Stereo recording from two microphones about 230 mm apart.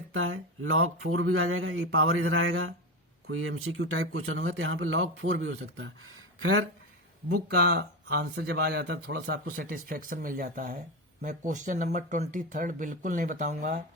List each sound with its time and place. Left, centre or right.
0.1 s speech: right
7.4 s speech: right